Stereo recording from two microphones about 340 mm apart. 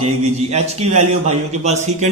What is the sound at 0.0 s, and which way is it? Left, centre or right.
A man's voice, centre.